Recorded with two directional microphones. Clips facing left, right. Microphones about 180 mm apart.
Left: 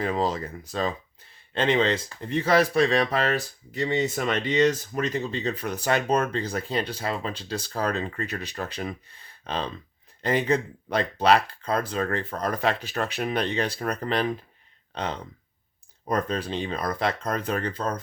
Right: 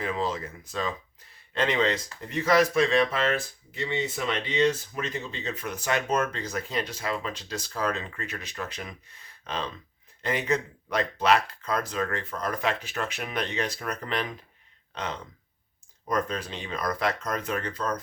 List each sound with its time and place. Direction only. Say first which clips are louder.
0.0 s speech: left 4 dB; 35° left (ahead or behind)